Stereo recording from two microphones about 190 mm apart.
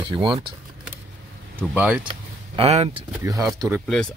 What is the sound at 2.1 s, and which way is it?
Speech, 30° right (ahead or behind).